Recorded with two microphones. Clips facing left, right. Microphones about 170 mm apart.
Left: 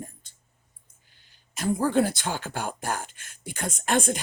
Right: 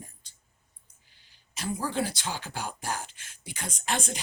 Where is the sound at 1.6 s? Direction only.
50° left (ahead or behind).